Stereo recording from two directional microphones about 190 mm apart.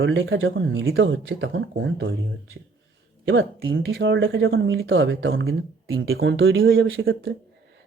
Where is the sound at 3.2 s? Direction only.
85° right.